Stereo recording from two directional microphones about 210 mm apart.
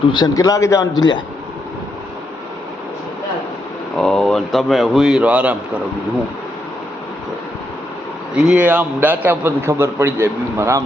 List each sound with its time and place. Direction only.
0.1 s a man's voice: 20° left (ahead or behind)
3.9 s a man's voice: 5° left (ahead or behind)
8.4 s a man's voice: 5° right (ahead or behind)